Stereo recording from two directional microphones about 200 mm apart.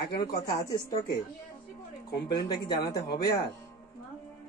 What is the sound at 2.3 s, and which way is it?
Speech, 20° left (ahead or behind).